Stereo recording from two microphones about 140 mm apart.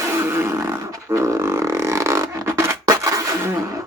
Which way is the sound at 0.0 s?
15° right (ahead or behind).